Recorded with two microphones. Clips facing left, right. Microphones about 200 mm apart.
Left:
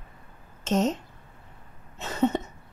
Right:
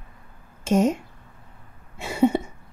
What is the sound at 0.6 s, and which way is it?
Speech, 10° right (ahead or behind).